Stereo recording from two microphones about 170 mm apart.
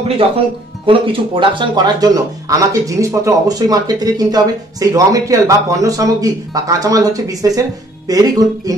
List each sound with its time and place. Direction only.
0.8 s speech: 30° right (ahead or behind)